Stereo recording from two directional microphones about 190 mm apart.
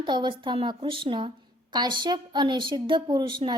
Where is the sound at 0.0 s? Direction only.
25° right (ahead or behind).